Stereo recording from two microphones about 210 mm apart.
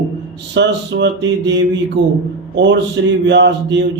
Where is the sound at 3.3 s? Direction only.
55° right (ahead or behind).